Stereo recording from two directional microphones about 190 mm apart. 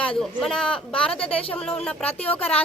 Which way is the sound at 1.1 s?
30° left (ahead or behind).